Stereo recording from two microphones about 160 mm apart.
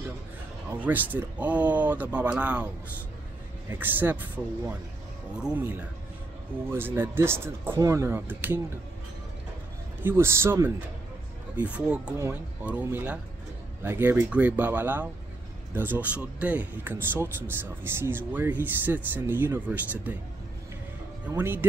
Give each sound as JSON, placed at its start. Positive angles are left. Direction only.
{"t": 0.7, "sound": "speech", "side_deg": -10}
{"t": 3.7, "sound": "speech", "side_deg": -10}
{"t": 5.3, "sound": "speech", "side_deg": -10}
{"t": 10.0, "sound": "speech", "side_deg": -15}
{"t": 21.3, "sound": "speech", "side_deg": -15}